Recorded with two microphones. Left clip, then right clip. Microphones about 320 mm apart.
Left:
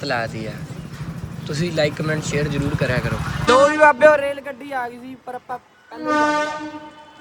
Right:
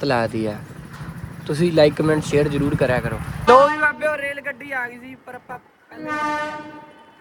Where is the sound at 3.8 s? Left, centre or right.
Centre.